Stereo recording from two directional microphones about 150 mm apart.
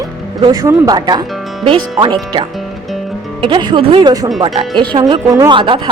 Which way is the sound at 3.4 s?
30° right (ahead or behind).